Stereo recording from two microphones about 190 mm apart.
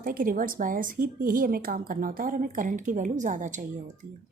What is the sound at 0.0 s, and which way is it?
Speech, 45° right (ahead or behind).